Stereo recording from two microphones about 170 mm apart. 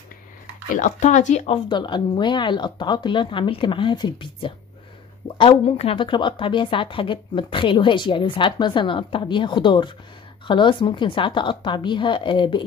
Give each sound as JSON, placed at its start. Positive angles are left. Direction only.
{"t": 0.7, "sound": "speech", "side_deg": 45}
{"t": 1.7, "sound": "a woman's voice", "side_deg": 25}